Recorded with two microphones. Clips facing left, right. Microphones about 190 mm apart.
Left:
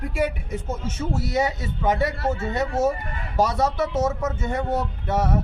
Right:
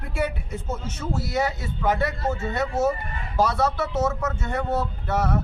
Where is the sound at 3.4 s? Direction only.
20° left (ahead or behind).